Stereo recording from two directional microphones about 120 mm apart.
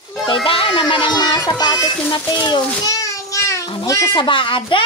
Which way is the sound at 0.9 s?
40° left (ahead or behind).